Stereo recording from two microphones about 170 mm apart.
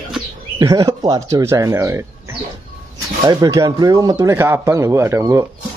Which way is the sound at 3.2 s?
25° right (ahead or behind).